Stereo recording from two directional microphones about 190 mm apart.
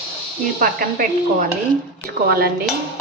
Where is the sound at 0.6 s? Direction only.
50° right (ahead or behind).